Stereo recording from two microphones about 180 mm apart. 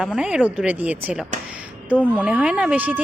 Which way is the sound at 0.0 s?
5° right (ahead or behind).